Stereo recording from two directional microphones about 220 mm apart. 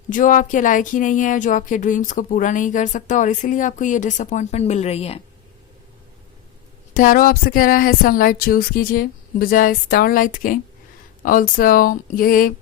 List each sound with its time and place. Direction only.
0.1 s speech: 35° left (ahead or behind)
6.9 s speech: 35° left (ahead or behind)